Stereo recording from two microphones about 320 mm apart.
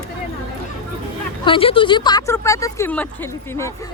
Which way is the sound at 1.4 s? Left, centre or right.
Centre.